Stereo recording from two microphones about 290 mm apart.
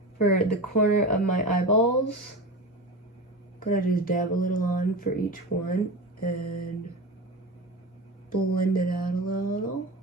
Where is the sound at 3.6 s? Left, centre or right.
Left.